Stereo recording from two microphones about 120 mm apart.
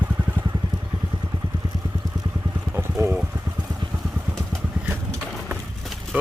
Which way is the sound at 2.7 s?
20° right (ahead or behind).